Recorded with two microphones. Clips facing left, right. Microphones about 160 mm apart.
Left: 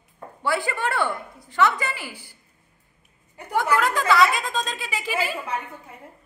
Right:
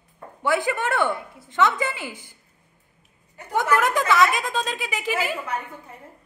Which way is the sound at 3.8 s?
15° right (ahead or behind).